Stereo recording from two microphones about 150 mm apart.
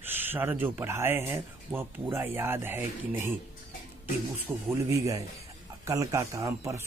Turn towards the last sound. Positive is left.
turn(degrees=-20)  # may be behind; listen again after turning